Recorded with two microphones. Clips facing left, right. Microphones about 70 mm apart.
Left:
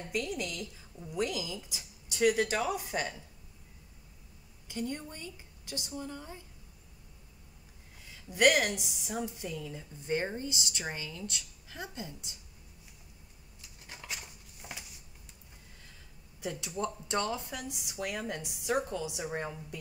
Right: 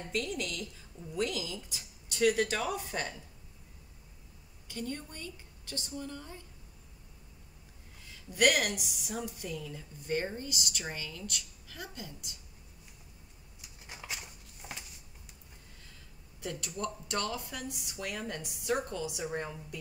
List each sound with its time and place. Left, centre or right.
0.1 s speech: centre
4.6 s speech: centre
8.3 s a woman's voice: centre
14.0 s a sound: centre
16.3 s a woman's voice: centre